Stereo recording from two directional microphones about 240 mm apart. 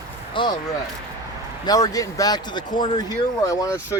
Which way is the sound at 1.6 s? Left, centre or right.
Centre.